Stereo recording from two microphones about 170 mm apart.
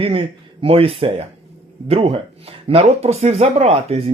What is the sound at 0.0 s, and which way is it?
Speech, 30° right (ahead or behind).